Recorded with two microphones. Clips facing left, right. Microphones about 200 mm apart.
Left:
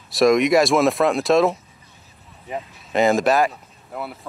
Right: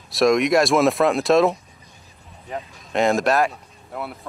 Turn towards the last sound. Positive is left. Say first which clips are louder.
# even
turn(degrees=0)  # may be behind; listen again after turning